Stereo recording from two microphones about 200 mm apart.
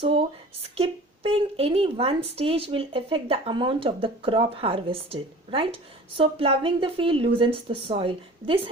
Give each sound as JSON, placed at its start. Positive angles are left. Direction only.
{"t": 0.0, "sound": "a woman's voice", "side_deg": -30}